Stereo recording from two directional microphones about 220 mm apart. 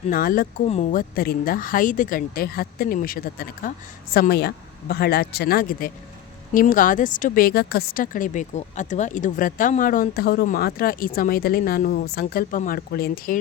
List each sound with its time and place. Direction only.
0.1 s speech: 40° left (ahead or behind)